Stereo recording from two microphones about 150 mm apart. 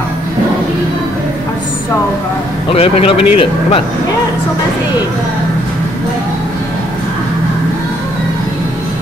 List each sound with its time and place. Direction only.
2.7 s a man's voice: 40° left (ahead or behind)